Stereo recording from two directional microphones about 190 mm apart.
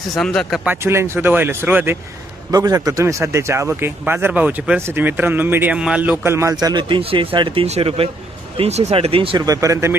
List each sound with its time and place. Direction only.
0.2 s speech: 5° left (ahead or behind)
0.7 s speech: 15° right (ahead or behind)
9.6 s speech: 15° right (ahead or behind)